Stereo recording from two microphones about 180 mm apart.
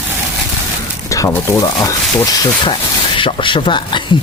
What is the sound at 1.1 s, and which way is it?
Speech, 15° left (ahead or behind).